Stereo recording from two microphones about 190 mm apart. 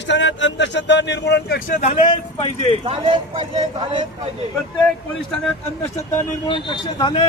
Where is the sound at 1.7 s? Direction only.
40° left (ahead or behind).